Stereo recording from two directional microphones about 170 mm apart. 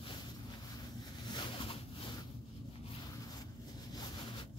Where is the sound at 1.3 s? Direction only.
30° left (ahead or behind).